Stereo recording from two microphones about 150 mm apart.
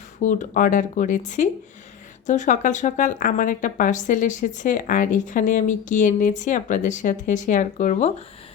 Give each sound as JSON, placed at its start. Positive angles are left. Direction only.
{"t": 0.2, "sound": "a woman's voice", "side_deg": 55}